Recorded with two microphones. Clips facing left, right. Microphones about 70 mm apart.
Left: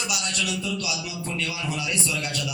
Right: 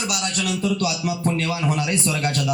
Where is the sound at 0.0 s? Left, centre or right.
Right.